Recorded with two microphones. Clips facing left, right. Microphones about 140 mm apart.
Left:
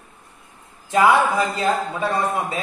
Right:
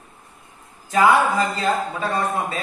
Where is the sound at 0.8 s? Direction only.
20° left (ahead or behind).